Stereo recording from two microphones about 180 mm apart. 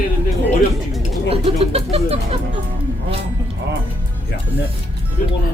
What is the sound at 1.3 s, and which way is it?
Speech, 35° right (ahead or behind).